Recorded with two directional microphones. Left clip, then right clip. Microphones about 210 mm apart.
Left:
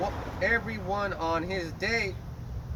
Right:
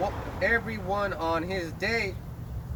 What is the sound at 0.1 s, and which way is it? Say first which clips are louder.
Speech: right 1 dB; 45° left (ahead or behind).